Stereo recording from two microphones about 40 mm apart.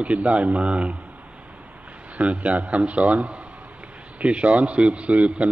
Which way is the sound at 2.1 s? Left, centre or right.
Right.